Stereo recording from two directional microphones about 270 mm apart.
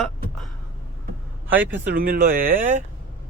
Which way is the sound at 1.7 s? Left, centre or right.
Right.